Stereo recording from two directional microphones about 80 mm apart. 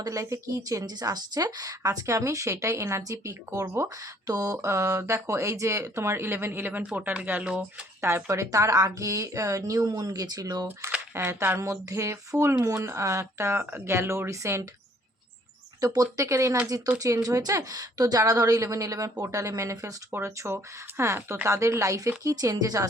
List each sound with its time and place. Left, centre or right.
0.0 s speech: right
4.6 s speech: right; by 7.6 s centre
8.0 s speech: right
11.1 s speech: right
15.8 s speech: right